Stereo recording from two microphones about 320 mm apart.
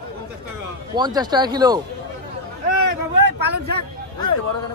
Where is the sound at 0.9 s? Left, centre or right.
Centre.